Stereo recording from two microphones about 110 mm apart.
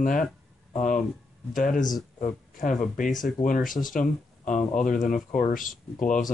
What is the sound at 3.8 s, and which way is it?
Speech, 90° left.